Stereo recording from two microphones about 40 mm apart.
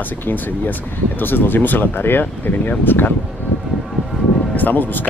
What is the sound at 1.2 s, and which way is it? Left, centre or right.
Speech, left.